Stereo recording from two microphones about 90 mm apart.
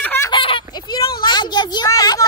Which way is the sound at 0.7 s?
50° left (ahead or behind).